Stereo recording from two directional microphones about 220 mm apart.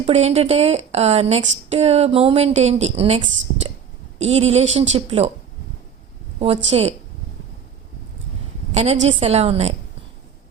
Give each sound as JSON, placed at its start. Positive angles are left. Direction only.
{"t": 0.0, "sound": "speech", "side_deg": -30}
{"t": 6.4, "sound": "speech", "side_deg": -25}
{"t": 8.7, "sound": "a woman's voice", "side_deg": -30}